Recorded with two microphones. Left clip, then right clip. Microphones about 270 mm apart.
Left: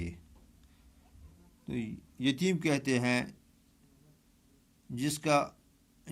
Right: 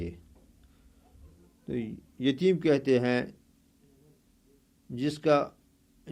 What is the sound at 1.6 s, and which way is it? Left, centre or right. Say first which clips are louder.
A man's voice: right 4 dB; left.